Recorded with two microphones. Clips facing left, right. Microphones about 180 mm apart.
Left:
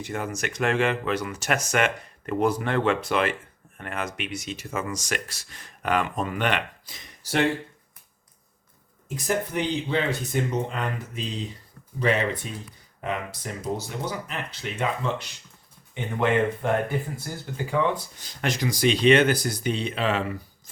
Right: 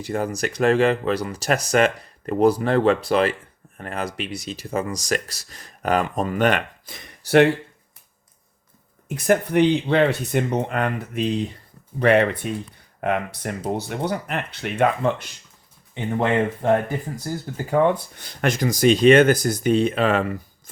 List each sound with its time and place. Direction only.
0.0 s speech: 35° right (ahead or behind); by 7.4 s 65° right (ahead or behind)
9.0 s speech: 60° right (ahead or behind)
17.3 s speech: 40° right (ahead or behind)
17.7 s speech: 50° right (ahead or behind)